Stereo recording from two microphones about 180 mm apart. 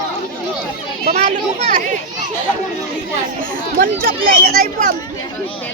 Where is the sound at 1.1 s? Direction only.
35° right (ahead or behind).